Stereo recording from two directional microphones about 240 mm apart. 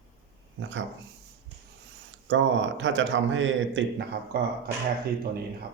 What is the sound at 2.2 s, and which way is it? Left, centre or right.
A man's voice, right.